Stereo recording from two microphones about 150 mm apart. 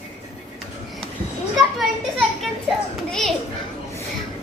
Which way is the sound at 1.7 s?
Centre (ahead or behind).